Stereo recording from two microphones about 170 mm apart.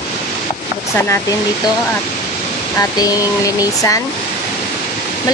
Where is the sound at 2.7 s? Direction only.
20° left (ahead or behind).